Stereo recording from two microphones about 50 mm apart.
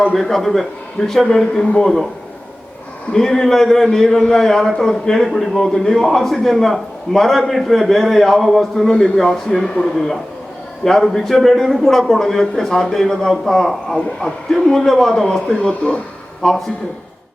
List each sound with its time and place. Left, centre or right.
0.1 s a man's voice: centre
3.1 s a man's voice: centre
15.3 s speech: centre
16.4 s a man's voice: centre